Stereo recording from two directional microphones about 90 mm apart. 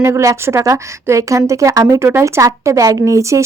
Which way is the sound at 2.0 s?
30° right (ahead or behind).